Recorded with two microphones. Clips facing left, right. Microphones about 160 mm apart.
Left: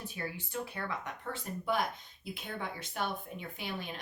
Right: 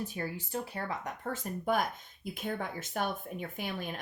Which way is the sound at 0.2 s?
40° right (ahead or behind).